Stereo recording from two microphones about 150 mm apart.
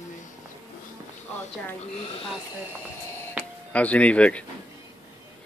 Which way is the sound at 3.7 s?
10° left (ahead or behind).